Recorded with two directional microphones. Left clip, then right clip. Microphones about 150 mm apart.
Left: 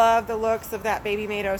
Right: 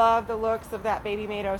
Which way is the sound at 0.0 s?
25° left (ahead or behind).